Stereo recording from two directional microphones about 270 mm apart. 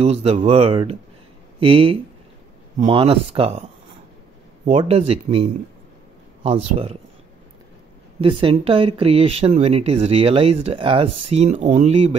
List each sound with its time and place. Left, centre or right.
0.0 s speech: right
4.6 s speech: right
8.2 s speech: centre